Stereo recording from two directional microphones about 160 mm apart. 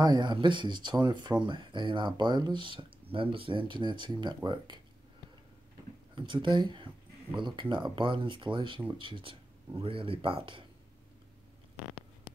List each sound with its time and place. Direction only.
0.0 s speech: 25° right (ahead or behind)
6.1 s speech: 30° right (ahead or behind)